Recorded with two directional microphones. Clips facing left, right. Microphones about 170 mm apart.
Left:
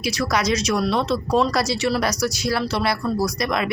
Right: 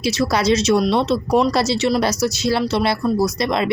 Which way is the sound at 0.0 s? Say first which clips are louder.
Right 4 dB; 30° right (ahead or behind).